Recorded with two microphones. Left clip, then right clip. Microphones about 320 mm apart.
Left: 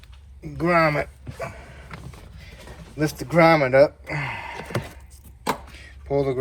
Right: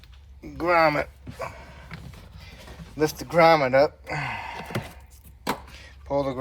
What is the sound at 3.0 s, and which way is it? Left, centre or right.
Speech, centre.